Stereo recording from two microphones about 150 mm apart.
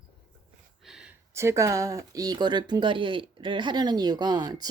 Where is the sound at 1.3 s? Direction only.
20° right (ahead or behind).